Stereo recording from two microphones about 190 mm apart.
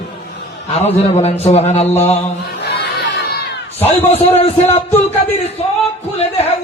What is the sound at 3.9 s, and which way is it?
Mantra, 35° left (ahead or behind).